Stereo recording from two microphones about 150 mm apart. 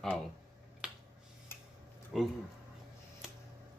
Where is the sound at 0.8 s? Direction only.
5° right (ahead or behind).